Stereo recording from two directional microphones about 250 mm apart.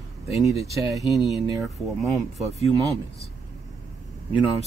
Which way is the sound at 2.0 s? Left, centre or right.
Centre.